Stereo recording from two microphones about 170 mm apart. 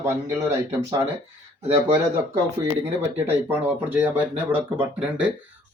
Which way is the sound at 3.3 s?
10° right (ahead or behind).